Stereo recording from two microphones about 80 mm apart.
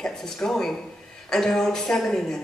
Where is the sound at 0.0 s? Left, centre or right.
Centre.